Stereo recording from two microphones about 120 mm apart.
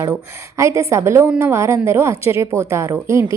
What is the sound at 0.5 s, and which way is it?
A woman's voice, 25° right (ahead or behind).